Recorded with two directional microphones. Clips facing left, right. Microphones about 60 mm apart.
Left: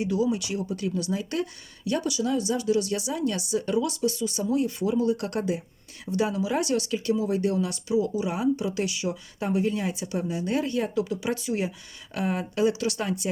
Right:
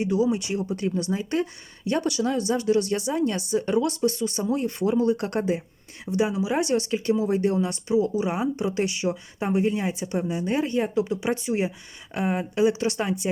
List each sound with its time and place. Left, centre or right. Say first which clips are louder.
0.0 s speech: right 2 dB; right
2.0 s speech: right 1 dB; right
6.1 s speech: right 2 dB; right
6.6 s speech: right 2 dB; right